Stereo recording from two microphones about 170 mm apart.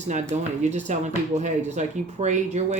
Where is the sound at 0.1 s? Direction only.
45° right (ahead or behind).